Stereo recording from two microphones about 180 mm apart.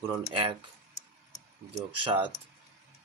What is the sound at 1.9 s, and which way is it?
Speech, 30° right (ahead or behind).